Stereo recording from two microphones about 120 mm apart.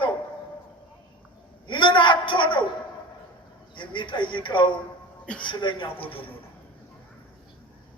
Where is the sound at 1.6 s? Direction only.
40° left (ahead or behind).